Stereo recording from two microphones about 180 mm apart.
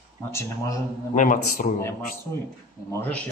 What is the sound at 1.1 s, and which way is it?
Speech, 45° left (ahead or behind).